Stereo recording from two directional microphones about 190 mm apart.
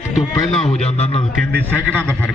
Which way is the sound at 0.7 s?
35° left (ahead or behind).